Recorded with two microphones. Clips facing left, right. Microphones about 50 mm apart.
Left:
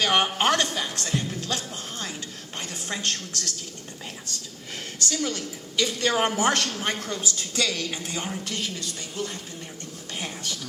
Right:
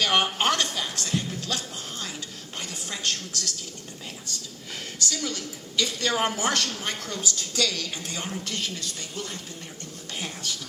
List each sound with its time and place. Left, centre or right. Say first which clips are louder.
0.0 s a woman's voice: left 1 dB; left
4.9 s a woman's voice: left 3 dB; left; by 9.4 s centre
10.2 s speech: left 1 dB; left